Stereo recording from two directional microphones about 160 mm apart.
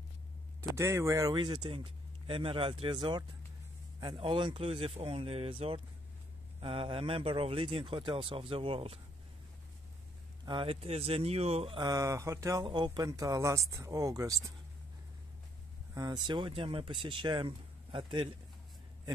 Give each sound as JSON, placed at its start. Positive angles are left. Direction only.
{"t": 0.7, "sound": "speech", "side_deg": -15}
{"t": 10.4, "sound": "speech", "side_deg": -30}
{"t": 11.9, "sound": "speech", "side_deg": -20}
{"t": 15.9, "sound": "speech", "side_deg": -25}